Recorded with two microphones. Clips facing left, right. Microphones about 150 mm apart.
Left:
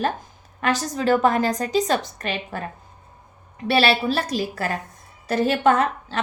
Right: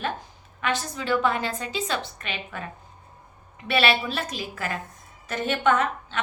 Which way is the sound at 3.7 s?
35° left (ahead or behind).